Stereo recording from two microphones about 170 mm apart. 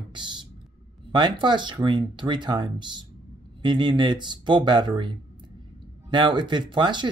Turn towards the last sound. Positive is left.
turn(degrees=-25)  # may be behind; listen again after turning